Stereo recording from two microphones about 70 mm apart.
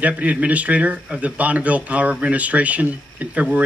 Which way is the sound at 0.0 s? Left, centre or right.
Centre.